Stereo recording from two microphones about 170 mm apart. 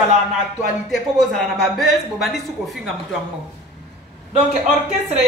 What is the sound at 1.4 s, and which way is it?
A woman's voice, centre (ahead or behind).